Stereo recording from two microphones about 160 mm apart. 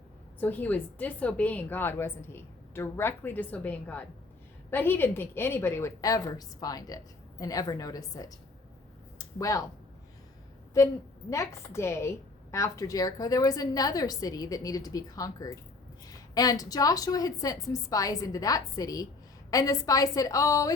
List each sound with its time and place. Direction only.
0.3 s a woman's voice: 10° left (ahead or behind)
9.1 s a sound: 20° left (ahead or behind)
11.3 s a woman's voice: 20° left (ahead or behind)